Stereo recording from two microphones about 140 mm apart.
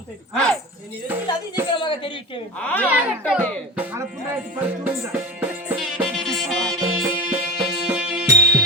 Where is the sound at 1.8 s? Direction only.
35° left (ahead or behind).